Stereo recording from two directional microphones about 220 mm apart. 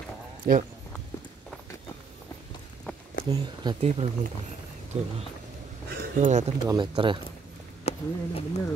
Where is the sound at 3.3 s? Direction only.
20° right (ahead or behind).